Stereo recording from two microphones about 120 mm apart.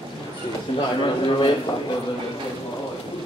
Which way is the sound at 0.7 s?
40° left (ahead or behind).